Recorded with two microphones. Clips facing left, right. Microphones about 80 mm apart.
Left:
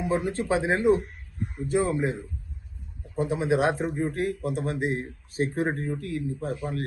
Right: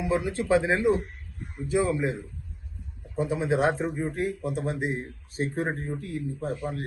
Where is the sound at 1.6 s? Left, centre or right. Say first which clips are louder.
Even; left.